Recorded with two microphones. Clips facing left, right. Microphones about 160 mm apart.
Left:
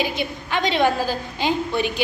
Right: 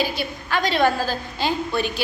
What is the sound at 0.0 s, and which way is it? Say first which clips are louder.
A woman's voice: left 1 dB; 20° left (ahead or behind).